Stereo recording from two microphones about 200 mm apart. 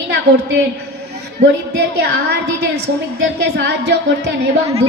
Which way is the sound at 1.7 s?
55° right (ahead or behind).